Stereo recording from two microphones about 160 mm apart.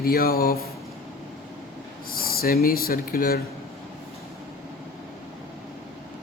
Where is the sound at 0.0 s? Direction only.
70° left (ahead or behind).